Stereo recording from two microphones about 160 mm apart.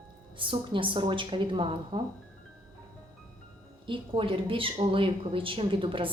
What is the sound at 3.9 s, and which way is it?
A woman's voice, 35° right (ahead or behind).